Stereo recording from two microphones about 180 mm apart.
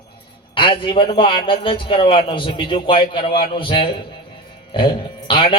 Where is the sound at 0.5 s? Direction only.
30° left (ahead or behind).